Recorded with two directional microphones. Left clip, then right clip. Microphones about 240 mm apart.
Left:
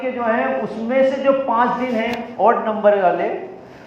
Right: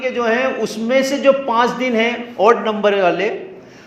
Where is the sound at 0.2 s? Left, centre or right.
Right.